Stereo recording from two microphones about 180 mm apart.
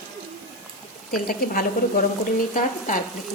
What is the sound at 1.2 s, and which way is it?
Speech, 55° left (ahead or behind).